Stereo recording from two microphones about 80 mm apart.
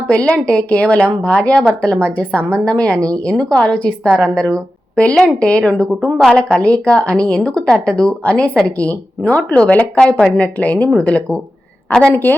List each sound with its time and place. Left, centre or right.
0.1 s a woman's voice: centre